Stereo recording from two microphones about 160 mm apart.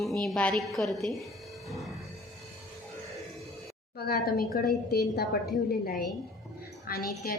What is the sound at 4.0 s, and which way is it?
A woman's voice, 75° left (ahead or behind).